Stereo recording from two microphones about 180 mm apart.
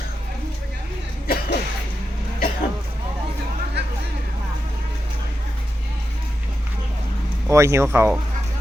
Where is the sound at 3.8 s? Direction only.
70° right (ahead or behind).